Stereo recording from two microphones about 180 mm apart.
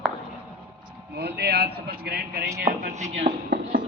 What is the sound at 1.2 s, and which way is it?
A man's voice, 65° right (ahead or behind).